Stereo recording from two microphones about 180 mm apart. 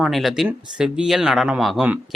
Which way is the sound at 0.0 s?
Centre (ahead or behind).